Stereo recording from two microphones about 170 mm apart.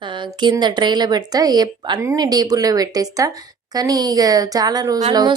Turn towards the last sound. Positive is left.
turn(degrees=-25)  # may be behind; listen again after turning